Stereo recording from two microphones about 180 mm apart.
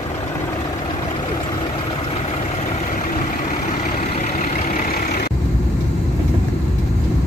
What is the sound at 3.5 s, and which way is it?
Vehicle, 40° left (ahead or behind).